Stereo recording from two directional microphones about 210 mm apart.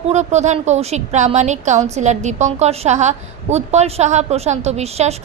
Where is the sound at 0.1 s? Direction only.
35° right (ahead or behind).